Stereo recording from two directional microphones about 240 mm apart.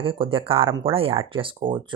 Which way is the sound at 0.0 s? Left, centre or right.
Right.